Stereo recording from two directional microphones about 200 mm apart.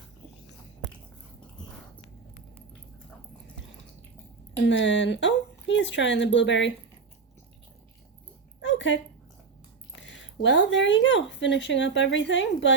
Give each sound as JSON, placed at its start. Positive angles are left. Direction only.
{"t": 4.6, "sound": "speech", "side_deg": 65}
{"t": 8.6, "sound": "dog", "side_deg": 65}
{"t": 10.0, "sound": "speech", "side_deg": 65}